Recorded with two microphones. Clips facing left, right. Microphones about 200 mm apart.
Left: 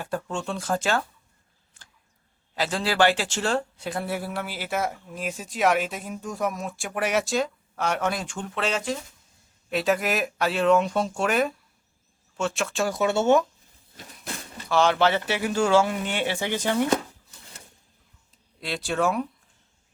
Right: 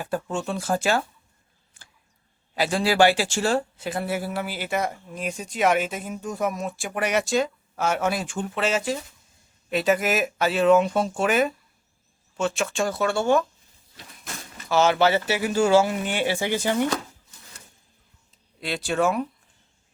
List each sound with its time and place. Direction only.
0.0 s speech: 5° right (ahead or behind)
2.6 s speech: 10° right (ahead or behind)
12.9 s speech: 20° left (ahead or behind)
14.7 s speech: 5° right (ahead or behind)
18.6 s speech: centre (ahead or behind)